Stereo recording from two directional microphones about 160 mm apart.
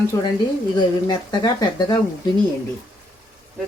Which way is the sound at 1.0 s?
25° left (ahead or behind).